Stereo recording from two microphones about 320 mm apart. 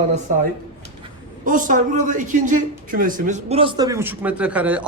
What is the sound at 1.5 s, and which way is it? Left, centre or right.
A woman's voice, right.